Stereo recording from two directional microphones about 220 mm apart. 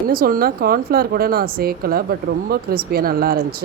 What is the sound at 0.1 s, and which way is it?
A woman's voice, 40° right (ahead or behind).